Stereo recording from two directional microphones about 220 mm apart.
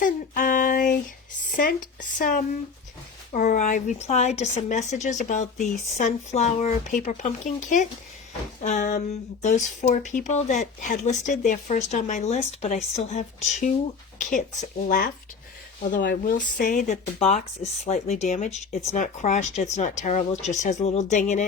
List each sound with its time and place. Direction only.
0.0 s child singing: 35° left (ahead or behind)
1.5 s speech: 40° left (ahead or behind)
16.2 s speech: 35° left (ahead or behind)